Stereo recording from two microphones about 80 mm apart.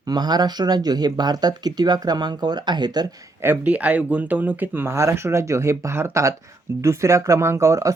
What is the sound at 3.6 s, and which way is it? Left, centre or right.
Speech, centre.